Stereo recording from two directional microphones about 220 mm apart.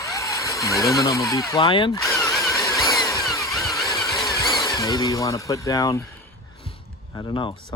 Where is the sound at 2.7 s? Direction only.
Centre (ahead or behind).